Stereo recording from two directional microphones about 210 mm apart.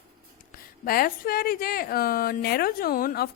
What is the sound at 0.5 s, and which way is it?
A woman's voice, 45° left (ahead or behind).